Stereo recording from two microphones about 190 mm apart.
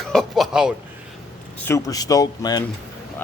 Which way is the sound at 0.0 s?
Centre (ahead or behind).